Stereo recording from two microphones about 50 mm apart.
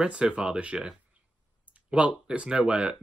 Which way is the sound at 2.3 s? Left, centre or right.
Centre.